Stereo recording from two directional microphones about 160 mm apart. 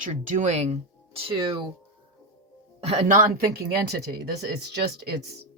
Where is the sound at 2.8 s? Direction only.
45° right (ahead or behind).